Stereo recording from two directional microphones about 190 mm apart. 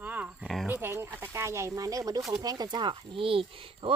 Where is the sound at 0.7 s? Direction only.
10° right (ahead or behind).